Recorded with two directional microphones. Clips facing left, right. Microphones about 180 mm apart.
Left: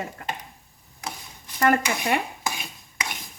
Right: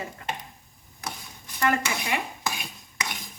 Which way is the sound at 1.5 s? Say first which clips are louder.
Left 4 dB; 45° left (ahead or behind).